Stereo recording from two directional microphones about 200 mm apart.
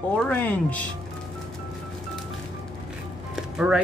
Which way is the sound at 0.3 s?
10° left (ahead or behind).